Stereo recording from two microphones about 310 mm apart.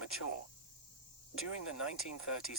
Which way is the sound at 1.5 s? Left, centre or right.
Left.